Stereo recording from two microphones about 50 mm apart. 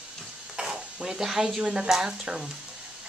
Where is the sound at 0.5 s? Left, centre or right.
Centre.